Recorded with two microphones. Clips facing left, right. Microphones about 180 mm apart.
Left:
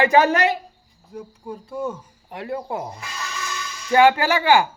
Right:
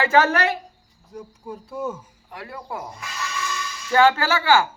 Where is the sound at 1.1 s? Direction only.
Centre (ahead or behind).